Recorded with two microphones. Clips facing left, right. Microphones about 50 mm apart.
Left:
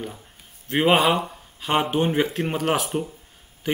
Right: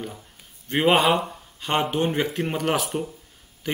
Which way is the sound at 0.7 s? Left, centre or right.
Centre.